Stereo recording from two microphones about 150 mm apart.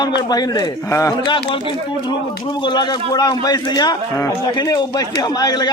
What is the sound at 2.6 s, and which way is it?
A man's voice, 25° left (ahead or behind).